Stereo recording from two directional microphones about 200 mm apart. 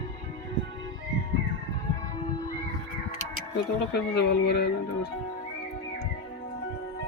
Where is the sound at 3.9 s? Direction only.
55° left (ahead or behind).